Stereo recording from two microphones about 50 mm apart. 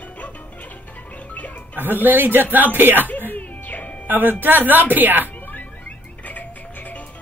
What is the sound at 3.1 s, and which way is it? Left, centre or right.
Music, left.